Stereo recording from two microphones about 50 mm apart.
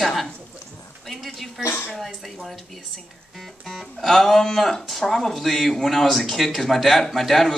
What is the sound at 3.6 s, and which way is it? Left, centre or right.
Speech, centre.